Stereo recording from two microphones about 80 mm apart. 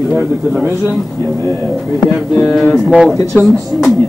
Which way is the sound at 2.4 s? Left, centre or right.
Centre.